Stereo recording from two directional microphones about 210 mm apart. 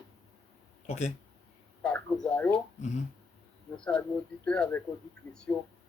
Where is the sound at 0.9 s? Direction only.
35° left (ahead or behind).